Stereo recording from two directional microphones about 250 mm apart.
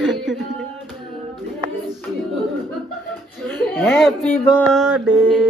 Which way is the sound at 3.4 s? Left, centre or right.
Centre.